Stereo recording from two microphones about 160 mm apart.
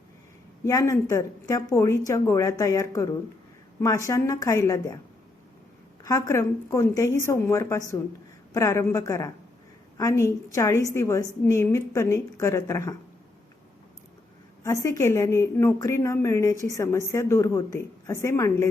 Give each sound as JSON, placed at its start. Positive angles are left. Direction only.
{"t": 0.6, "sound": "speech", "side_deg": 20}
{"t": 6.0, "sound": "a woman's voice", "side_deg": 20}
{"t": 14.6, "sound": "a woman's voice", "side_deg": 20}